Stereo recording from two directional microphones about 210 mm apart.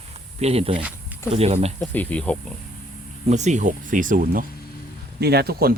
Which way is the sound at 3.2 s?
35° right (ahead or behind).